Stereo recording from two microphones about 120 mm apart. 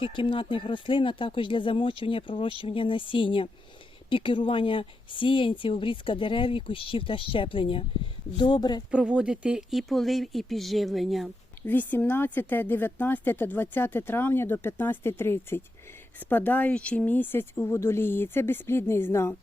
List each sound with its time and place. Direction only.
0.0 s speech: 45° left (ahead or behind)
8.9 s speech: 10° right (ahead or behind)
11.6 s speech: 15° left (ahead or behind)